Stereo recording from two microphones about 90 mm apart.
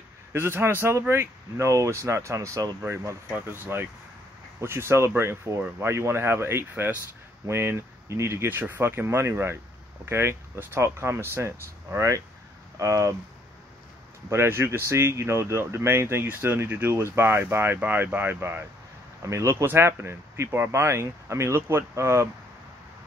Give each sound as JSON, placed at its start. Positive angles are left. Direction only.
{"t": 0.3, "sound": "speech", "side_deg": -25}
{"t": 14.3, "sound": "speech", "side_deg": -30}